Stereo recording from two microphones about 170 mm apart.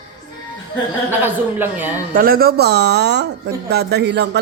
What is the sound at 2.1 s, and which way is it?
Speech, 60° right (ahead or behind).